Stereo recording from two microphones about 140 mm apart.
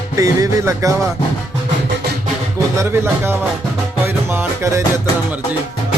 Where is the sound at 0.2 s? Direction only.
25° right (ahead or behind).